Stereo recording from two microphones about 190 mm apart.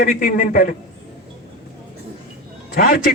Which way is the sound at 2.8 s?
50° left (ahead or behind).